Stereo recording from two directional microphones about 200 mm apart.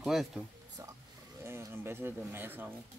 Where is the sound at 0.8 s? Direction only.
20° right (ahead or behind).